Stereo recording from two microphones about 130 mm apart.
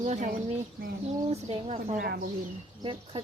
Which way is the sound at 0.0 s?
60° right (ahead or behind).